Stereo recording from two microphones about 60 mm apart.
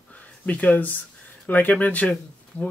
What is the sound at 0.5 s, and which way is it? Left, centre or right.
Speech, left.